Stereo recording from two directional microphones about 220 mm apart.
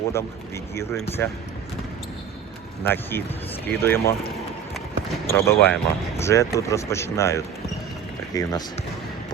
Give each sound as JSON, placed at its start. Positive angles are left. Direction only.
{"t": 0.1, "sound": "speech", "side_deg": 10}
{"t": 2.8, "sound": "speech", "side_deg": 10}
{"t": 5.3, "sound": "speech", "side_deg": 10}